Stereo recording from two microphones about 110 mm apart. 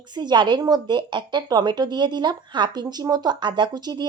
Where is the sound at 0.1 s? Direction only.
40° right (ahead or behind).